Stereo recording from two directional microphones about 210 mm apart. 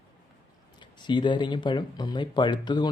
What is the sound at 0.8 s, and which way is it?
Speech, 20° left (ahead or behind).